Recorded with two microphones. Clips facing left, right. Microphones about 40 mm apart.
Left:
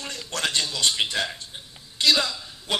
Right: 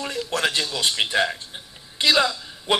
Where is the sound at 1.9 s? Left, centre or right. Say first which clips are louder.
Right 3 dB; centre.